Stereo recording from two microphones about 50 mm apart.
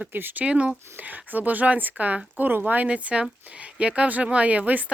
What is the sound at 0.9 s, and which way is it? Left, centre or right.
Speech, right.